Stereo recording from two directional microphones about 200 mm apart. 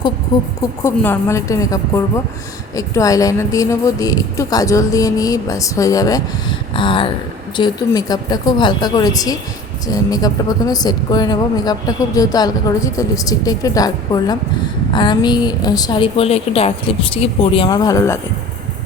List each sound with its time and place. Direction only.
0.3 s a woman's voice: 20° left (ahead or behind)